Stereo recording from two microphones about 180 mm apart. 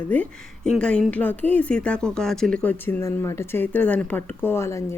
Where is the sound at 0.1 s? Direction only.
5° left (ahead or behind).